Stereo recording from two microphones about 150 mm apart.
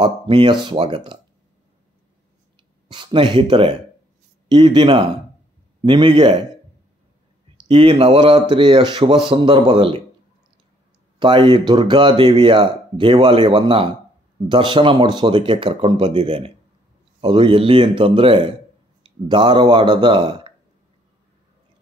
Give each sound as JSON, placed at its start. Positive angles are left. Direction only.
{"t": 0.0, "sound": "speech", "side_deg": -35}
{"t": 2.9, "sound": "speech", "side_deg": -35}
{"t": 7.5, "sound": "speech", "side_deg": -35}
{"t": 11.1, "sound": "speech", "side_deg": -35}